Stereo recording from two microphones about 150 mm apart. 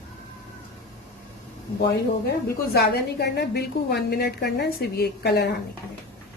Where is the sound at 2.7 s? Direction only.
90° left.